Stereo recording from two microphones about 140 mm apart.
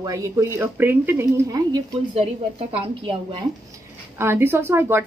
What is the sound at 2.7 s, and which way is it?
Speech, 40° right (ahead or behind).